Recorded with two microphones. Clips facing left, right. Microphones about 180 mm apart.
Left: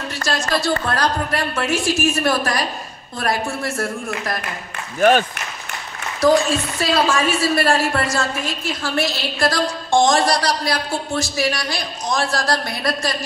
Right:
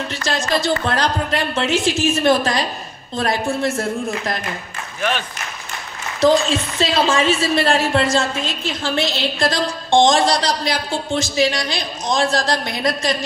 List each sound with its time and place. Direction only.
0.1 s a sound: 20° right (ahead or behind)
0.5 s a woman's voice: 20° right (ahead or behind)
6.2 s a woman's voice: 20° right (ahead or behind)